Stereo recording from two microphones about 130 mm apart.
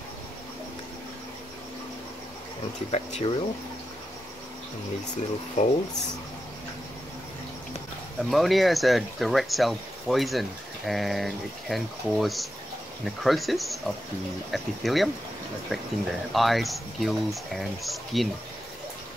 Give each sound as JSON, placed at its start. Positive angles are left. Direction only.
{"t": 2.9, "sound": "speech", "side_deg": 50}
{"t": 5.6, "sound": "speech", "side_deg": 65}
{"t": 8.2, "sound": "speech", "side_deg": 0}